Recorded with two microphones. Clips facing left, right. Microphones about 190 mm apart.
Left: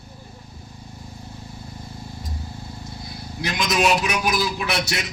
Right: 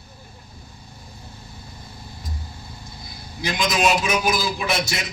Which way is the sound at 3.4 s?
70° left (ahead or behind).